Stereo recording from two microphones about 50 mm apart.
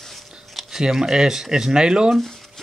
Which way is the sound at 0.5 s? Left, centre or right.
Centre.